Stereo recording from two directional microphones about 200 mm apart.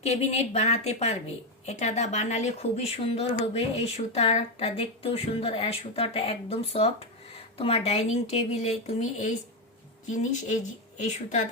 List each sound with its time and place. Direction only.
0.0 s speech: 35° left (ahead or behind)